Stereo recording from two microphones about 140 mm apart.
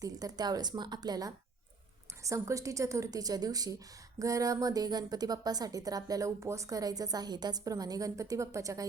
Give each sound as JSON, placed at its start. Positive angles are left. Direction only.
{"t": 0.0, "sound": "a woman's voice", "side_deg": -25}